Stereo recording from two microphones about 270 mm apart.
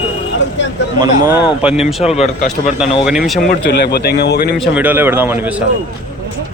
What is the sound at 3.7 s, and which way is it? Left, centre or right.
Speech, left.